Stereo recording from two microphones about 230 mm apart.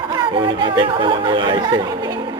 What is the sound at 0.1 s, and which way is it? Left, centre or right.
A woman's voice, right.